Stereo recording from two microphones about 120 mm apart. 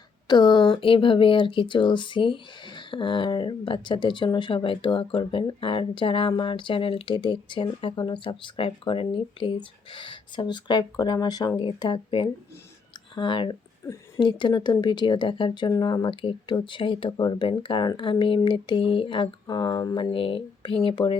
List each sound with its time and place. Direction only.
0.3 s speech: 40° left (ahead or behind)